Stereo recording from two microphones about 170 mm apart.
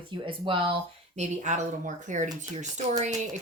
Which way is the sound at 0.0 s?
30° right (ahead or behind).